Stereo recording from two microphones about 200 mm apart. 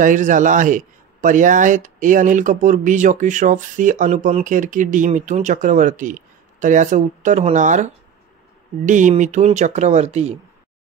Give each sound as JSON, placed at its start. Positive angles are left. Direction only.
{"t": 0.0, "sound": "a man's voice", "side_deg": -40}